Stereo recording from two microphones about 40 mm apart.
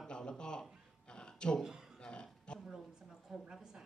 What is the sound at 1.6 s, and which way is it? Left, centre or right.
Speech, centre.